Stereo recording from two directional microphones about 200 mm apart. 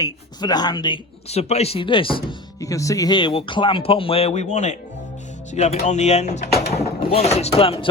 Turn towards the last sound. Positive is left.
turn(degrees=30)  # may be behind; listen again after turning